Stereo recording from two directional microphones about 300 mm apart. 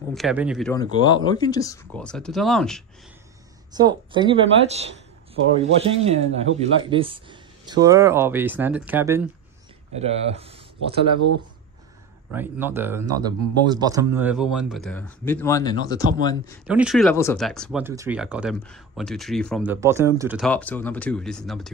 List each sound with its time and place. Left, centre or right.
0.1 s speech: centre
1.0 s speech: centre
3.7 s speech: centre
9.9 s speech: right
12.3 s speech: centre
16.6 s speech: centre